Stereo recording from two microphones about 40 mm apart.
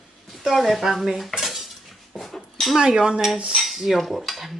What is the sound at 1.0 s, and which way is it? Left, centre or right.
Cutlery, centre.